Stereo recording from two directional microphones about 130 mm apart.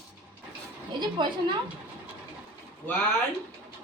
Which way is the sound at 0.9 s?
35° right (ahead or behind).